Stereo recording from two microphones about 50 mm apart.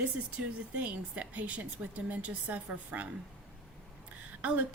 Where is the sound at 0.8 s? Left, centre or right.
Right.